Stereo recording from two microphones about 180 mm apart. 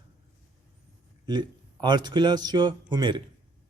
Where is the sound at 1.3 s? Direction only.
25° right (ahead or behind).